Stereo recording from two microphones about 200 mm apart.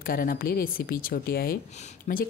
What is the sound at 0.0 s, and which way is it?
A woman's voice, 45° left (ahead or behind).